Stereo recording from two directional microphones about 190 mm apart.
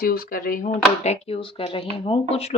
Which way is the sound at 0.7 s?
35° left (ahead or behind).